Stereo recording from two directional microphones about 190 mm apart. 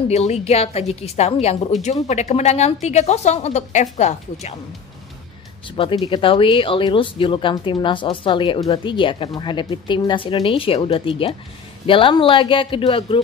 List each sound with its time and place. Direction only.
0.1 s a woman's voice: 35° left (ahead or behind)
5.8 s speech: 25° left (ahead or behind)